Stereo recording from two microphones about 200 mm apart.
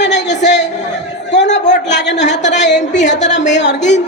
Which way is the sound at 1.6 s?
35° left (ahead or behind).